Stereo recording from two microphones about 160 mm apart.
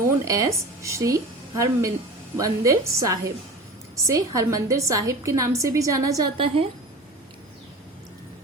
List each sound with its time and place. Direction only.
0.3 s a woman's voice: 20° right (ahead or behind)
6.3 s a woman's voice: 35° right (ahead or behind)